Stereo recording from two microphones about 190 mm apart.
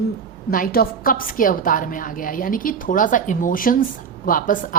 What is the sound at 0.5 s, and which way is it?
A woman's voice, 50° left (ahead or behind).